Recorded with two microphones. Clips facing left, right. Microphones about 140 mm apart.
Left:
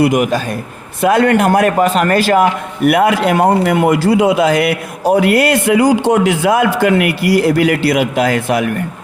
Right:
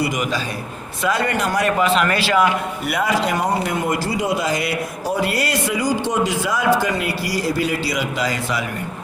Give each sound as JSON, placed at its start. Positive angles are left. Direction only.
{"t": 0.0, "sound": "a man's voice", "side_deg": 55}